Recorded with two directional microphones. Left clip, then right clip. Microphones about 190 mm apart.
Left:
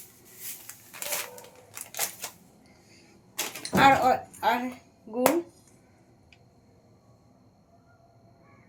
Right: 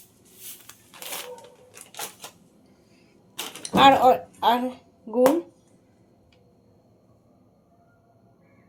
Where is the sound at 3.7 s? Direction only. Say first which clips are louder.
Right 4 dB; 35° right (ahead or behind).